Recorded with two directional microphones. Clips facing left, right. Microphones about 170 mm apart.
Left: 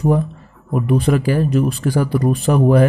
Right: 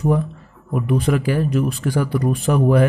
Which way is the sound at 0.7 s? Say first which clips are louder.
Left 3 dB; 35° left (ahead or behind).